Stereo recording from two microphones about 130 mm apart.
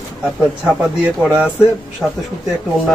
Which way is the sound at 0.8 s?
10° right (ahead or behind).